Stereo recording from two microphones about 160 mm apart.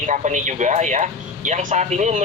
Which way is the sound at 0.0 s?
50° right (ahead or behind).